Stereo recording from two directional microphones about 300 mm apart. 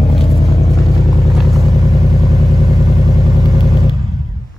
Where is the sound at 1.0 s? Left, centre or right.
Centre.